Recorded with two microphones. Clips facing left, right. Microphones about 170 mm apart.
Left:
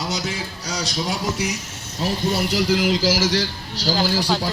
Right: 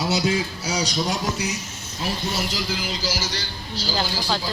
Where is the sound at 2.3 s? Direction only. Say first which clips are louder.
Left 7 dB; 65° left (ahead or behind); by 3.9 s 90° left.